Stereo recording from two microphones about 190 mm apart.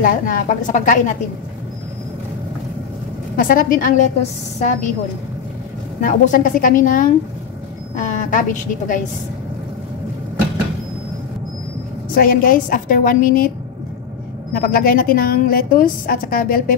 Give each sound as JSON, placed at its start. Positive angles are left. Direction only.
{"t": 0.0, "sound": "a woman's voice", "side_deg": 45}
{"t": 3.3, "sound": "a woman's voice", "side_deg": 45}
{"t": 6.0, "sound": "a woman's voice", "side_deg": 45}
{"t": 12.1, "sound": "a woman's voice", "side_deg": 50}
{"t": 14.5, "sound": "a woman's voice", "side_deg": 50}